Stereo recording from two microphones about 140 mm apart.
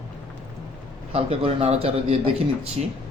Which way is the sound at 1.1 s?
45° right (ahead or behind).